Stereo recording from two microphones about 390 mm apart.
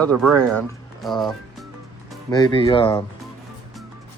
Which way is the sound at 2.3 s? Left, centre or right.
Centre.